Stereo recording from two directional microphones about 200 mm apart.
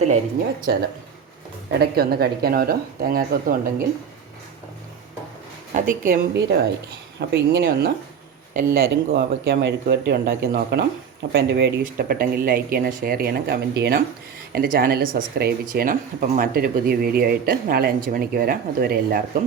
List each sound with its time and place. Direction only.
0.7 s speech: 55° right (ahead or behind)
5.7 s a woman's voice: 40° right (ahead or behind)
7.2 s speech: 55° right (ahead or behind)